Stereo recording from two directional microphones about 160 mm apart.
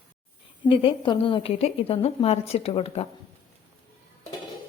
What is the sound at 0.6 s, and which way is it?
A woman's voice, 35° left (ahead or behind).